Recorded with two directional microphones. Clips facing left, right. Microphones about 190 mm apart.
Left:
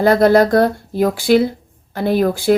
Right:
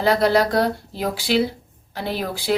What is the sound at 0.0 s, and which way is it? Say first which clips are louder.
Speech: left 6 dB; 50° left (ahead or behind).